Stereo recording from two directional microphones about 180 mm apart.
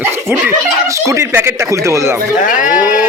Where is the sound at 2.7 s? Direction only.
10° right (ahead or behind).